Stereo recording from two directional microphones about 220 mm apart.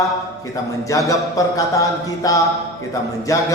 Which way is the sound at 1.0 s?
15° left (ahead or behind).